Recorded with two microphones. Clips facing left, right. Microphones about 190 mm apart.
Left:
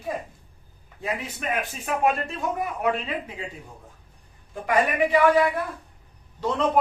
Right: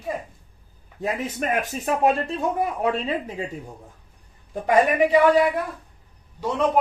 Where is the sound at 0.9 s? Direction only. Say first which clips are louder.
Right 5 dB; 45° right (ahead or behind).